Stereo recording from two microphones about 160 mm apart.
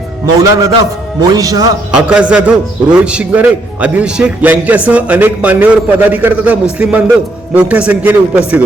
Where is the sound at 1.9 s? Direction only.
5° right (ahead or behind).